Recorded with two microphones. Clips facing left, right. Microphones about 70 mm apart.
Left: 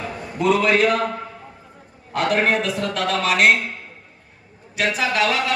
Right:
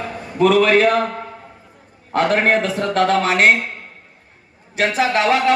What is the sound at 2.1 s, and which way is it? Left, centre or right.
Speech, right.